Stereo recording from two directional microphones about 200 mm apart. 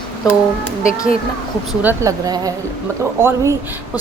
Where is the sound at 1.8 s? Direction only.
10° right (ahead or behind).